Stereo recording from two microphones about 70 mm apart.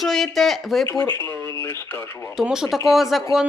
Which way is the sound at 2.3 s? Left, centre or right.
Centre.